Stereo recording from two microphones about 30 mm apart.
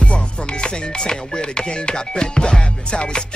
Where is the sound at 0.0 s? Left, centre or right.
Left.